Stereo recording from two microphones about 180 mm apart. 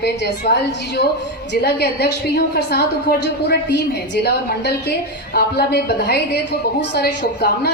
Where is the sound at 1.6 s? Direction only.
65° left (ahead or behind).